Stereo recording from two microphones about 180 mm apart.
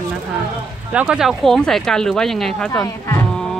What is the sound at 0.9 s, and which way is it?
Speech, 5° right (ahead or behind).